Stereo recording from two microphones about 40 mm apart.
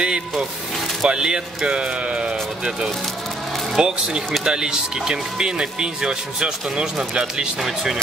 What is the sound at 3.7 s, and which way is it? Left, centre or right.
Speech, centre.